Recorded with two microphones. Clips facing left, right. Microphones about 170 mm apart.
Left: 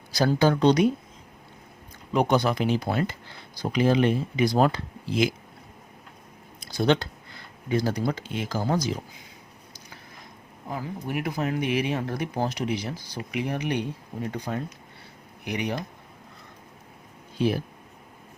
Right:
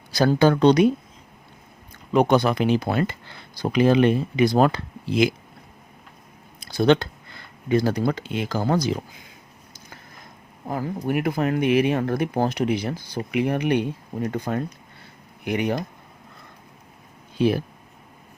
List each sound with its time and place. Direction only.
0.1 s speech: 60° right (ahead or behind)
2.1 s speech: 60° right (ahead or behind)
6.6 s speech: 60° right (ahead or behind)
10.7 s speech: 55° right (ahead or behind)